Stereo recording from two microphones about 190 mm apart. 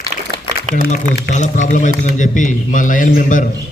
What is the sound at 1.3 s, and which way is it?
A man's voice, 40° left (ahead or behind).